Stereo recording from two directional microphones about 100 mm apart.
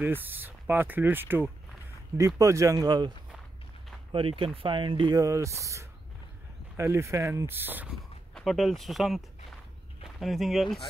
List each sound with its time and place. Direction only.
0.0 s speech: 20° right (ahead or behind)
2.1 s speech: 35° right (ahead or behind)
4.1 s speech: 60° right (ahead or behind)
5.1 s speech: 35° right (ahead or behind)
8.4 s speech: centre (ahead or behind)